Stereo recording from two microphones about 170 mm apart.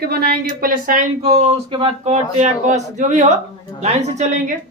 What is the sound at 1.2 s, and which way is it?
Speech, 35° right (ahead or behind).